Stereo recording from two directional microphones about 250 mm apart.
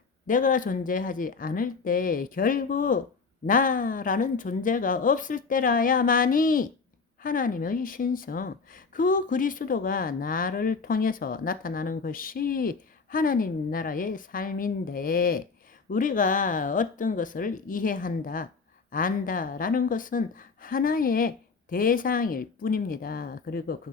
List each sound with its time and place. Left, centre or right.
0.3 s speech: left